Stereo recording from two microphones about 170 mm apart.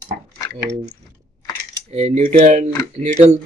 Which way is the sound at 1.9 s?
35° right (ahead or behind).